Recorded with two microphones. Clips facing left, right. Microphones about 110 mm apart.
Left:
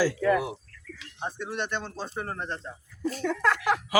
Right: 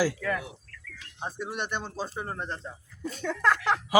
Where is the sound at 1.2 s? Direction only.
10° right (ahead or behind); by 3.8 s 5° left (ahead or behind).